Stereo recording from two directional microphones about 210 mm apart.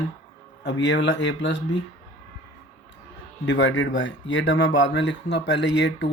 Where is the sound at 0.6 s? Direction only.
60° left (ahead or behind).